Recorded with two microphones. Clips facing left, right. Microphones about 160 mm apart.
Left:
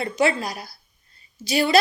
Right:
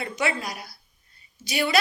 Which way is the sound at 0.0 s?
30° left (ahead or behind).